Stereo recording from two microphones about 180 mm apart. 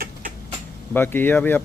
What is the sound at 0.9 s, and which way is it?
Speech, 10° left (ahead or behind).